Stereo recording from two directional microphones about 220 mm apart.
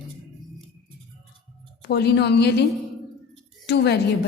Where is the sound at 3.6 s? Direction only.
50° left (ahead or behind).